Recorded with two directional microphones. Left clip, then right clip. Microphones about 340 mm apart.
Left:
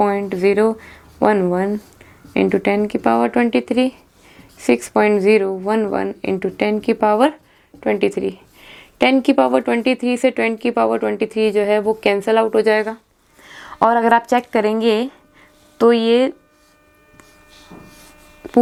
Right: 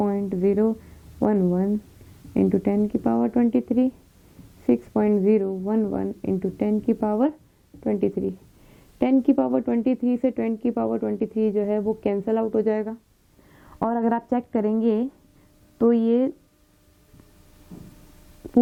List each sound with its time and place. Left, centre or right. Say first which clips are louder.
0.0 s speech: left 8 dB; centre